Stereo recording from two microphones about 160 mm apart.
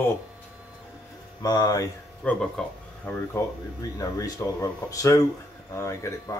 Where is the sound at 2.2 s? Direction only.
5° left (ahead or behind).